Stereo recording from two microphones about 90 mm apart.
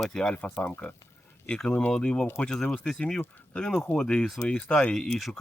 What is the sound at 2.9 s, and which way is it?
Speech, 5° left (ahead or behind).